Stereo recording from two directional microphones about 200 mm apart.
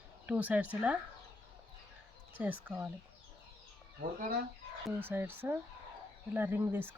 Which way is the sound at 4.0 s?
45° right (ahead or behind).